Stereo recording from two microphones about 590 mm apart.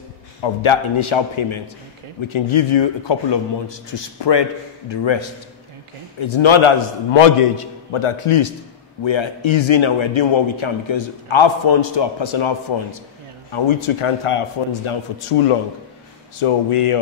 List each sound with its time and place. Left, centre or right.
0.4 s a man's voice: left